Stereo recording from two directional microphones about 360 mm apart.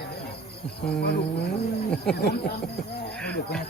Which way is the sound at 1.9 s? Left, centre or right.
Centre.